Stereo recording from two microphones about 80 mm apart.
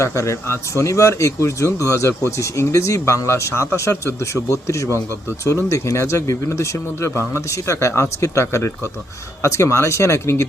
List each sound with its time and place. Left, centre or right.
0.0 s speech: left